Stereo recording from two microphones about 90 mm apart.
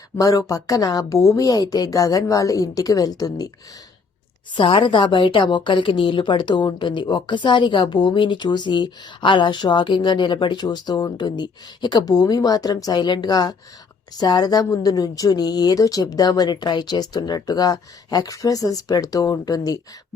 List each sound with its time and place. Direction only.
0.2 s a woman's voice: 40° left (ahead or behind)
4.5 s a woman's voice: 75° left (ahead or behind); by 19.8 s 45° left (ahead or behind)